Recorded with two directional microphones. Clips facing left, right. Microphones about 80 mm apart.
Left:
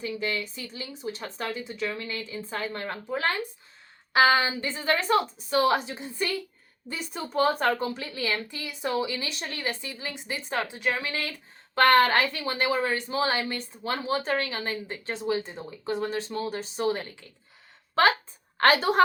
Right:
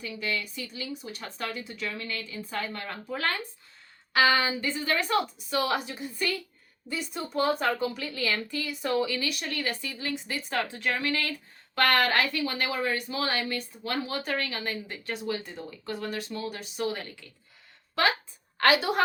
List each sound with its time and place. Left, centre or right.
0.0 s speech: left
7.1 s speech: left
7.9 s a woman's voice: left